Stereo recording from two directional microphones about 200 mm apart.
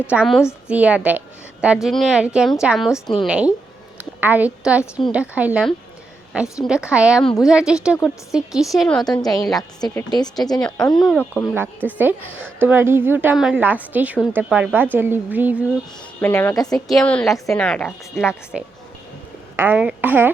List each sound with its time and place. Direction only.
0.1 s a woman's voice: 5° right (ahead or behind)
9.6 s a woman's voice: 20° left (ahead or behind)
10.6 s a woman's voice: 5° left (ahead or behind)
11.5 s a woman's voice: 10° right (ahead or behind)
16.2 s a woman's voice: 10° left (ahead or behind)
16.7 s a woman's voice: 5° left (ahead or behind)
19.5 s a woman's voice: 10° right (ahead or behind)